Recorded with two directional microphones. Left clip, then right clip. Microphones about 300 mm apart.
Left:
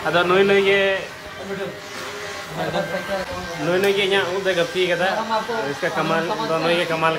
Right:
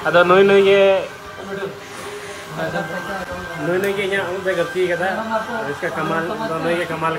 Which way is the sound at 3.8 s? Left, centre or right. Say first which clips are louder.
Left 3 dB; centre.